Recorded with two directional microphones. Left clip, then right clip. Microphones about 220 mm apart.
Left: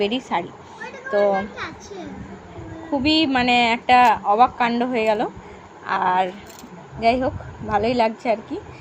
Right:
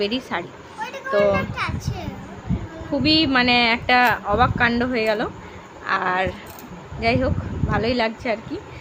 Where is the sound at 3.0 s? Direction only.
5° left (ahead or behind).